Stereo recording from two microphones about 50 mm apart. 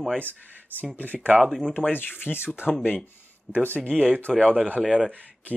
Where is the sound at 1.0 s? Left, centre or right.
Left.